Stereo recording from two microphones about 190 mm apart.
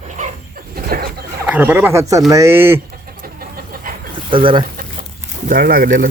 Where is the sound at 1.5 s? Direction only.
10° right (ahead or behind).